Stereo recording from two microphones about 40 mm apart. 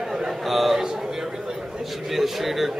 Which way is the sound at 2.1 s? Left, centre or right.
Centre.